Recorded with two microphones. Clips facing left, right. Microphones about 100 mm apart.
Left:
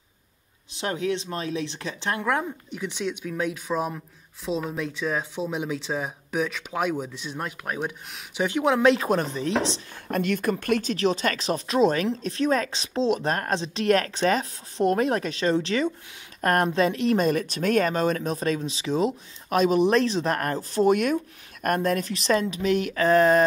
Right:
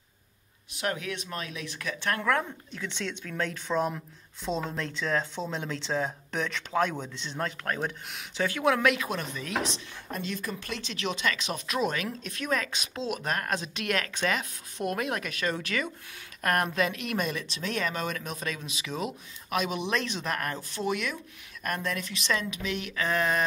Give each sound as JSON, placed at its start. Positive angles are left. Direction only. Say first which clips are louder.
{"t": 0.7, "sound": "speech", "louder": "left 5 dB", "side_deg": 25}
{"t": 8.4, "sound": "speech", "louder": "left 4 dB", "side_deg": 20}
{"t": 8.9, "sound": "speech", "louder": "left 8 dB", "side_deg": 35}
{"t": 10.1, "sound": "speech", "louder": "left 10 dB", "side_deg": 60}
{"t": 17.3, "sound": "speech", "louder": "left 10 dB", "side_deg": 50}